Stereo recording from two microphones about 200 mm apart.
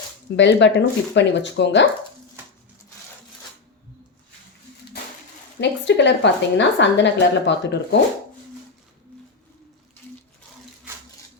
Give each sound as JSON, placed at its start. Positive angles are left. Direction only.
{"t": 0.3, "sound": "a woman's voice", "side_deg": 60}
{"t": 2.4, "sound": "a sound", "side_deg": -10}
{"t": 5.5, "sound": "a woman's voice", "side_deg": 60}